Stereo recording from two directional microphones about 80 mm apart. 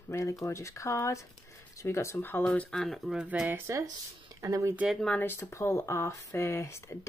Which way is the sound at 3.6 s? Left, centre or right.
Right.